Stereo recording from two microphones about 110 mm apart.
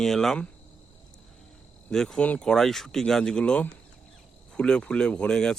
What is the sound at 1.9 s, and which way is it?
Speech, 5° left (ahead or behind).